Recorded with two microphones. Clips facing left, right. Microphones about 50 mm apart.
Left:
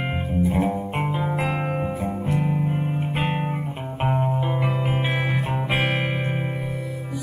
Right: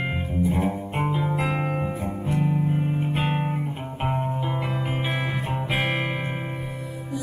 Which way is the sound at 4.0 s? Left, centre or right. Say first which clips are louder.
Left 3 dB; centre.